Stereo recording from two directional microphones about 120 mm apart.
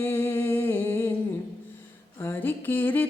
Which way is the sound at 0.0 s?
20° left (ahead or behind).